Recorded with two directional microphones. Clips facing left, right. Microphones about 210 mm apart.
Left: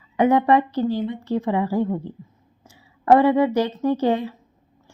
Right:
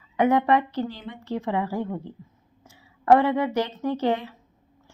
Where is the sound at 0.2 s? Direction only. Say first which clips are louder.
Left 3 dB; 30° left (ahead or behind).